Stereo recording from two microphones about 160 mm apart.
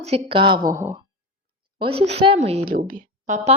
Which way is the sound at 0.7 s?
15° right (ahead or behind).